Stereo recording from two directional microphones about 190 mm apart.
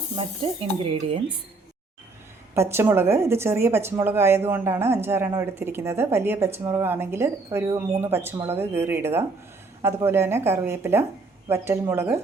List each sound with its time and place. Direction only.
0.4 s speech: 30° right (ahead or behind)
2.6 s speech: 10° right (ahead or behind)